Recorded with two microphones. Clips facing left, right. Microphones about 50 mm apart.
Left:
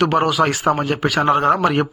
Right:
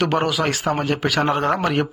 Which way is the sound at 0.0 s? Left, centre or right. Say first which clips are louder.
Left 4 dB; centre.